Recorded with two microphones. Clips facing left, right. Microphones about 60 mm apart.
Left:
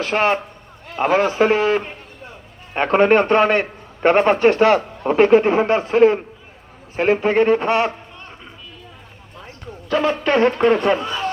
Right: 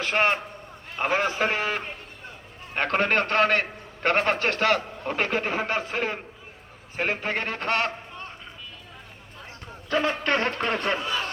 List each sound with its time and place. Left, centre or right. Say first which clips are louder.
0.1 s a man's voice: left 4 dB; left
9.9 s a man's voice: left 6 dB; left
10.2 s a man's voice: left 10 dB; centre